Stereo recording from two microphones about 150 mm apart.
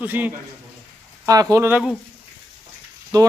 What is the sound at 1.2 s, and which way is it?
Speech, 25° right (ahead or behind).